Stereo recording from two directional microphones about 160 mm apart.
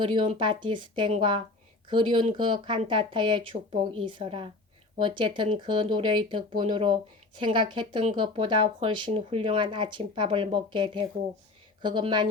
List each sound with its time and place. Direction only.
0.0 s speech: 30° right (ahead or behind)